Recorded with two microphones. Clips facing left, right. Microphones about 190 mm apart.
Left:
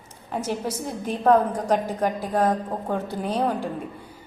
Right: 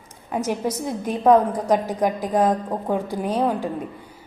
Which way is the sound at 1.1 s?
10° right (ahead or behind).